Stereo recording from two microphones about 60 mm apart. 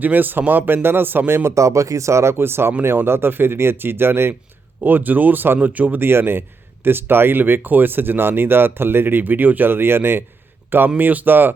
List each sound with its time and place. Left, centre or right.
0.0 s speech: right
1.5 s speech: right
6.0 s speech: right